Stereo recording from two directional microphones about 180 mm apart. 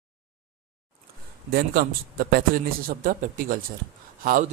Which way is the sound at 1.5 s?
60° right (ahead or behind).